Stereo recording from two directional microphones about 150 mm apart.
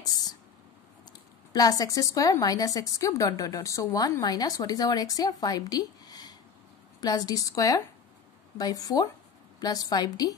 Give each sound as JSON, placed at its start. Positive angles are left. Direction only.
{"t": 1.5, "sound": "a woman's voice", "side_deg": 25}